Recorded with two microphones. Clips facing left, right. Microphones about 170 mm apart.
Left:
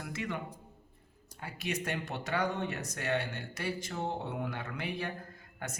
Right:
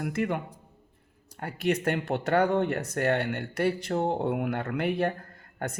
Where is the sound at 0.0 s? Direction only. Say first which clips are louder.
Right 9 dB; 55° right (ahead or behind).